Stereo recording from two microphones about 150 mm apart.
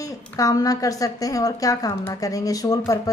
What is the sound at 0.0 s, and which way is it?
A woman's voice, 25° left (ahead or behind).